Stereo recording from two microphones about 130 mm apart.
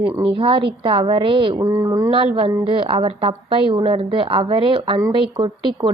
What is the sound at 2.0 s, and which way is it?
A woman's voice, 45° right (ahead or behind).